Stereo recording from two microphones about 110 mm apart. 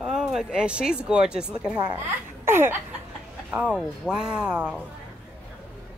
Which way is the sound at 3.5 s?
10° right (ahead or behind).